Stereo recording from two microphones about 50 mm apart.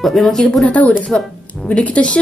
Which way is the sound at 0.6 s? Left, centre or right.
Left.